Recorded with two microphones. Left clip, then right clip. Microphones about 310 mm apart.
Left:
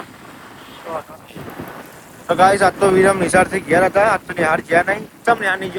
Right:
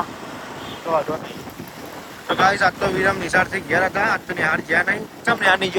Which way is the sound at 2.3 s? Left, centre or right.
Centre.